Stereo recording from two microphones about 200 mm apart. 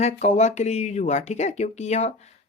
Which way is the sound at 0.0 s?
35° left (ahead or behind).